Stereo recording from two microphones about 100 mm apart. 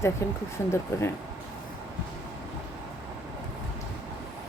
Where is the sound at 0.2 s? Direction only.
25° left (ahead or behind).